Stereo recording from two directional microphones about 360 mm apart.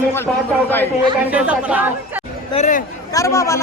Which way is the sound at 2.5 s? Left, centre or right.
Centre.